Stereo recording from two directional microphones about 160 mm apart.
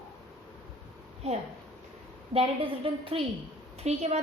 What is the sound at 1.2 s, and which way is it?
A woman's voice, 40° right (ahead or behind).